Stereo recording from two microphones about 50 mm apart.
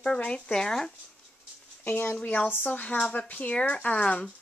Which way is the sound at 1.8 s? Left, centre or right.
Left.